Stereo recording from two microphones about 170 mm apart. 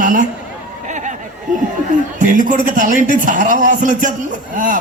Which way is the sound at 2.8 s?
50° right (ahead or behind).